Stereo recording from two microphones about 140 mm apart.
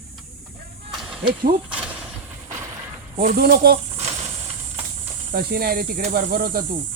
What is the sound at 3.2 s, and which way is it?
Speech, 90° right.